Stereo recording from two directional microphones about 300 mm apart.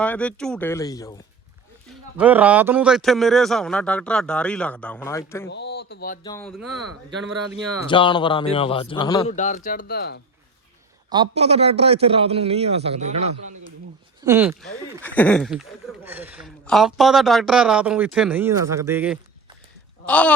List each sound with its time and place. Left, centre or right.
0.0 s speech: centre
1.9 s speech: centre
5.5 s speech: left
6.2 s a man's voice: centre
7.9 s a man's voice: centre; by 10.2 s left
11.1 s a man's voice: centre
14.2 s speech: centre
15.0 s speech: centre